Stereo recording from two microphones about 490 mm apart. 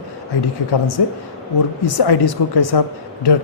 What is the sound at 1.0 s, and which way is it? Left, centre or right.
A man's voice, left.